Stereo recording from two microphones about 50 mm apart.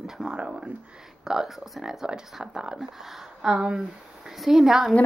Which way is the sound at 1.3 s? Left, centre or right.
Centre.